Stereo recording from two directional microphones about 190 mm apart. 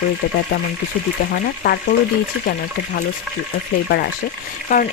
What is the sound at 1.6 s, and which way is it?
Speech, 55° left (ahead or behind).